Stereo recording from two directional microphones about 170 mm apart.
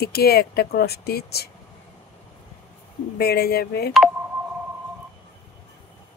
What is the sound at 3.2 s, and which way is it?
Speech, 65° left (ahead or behind).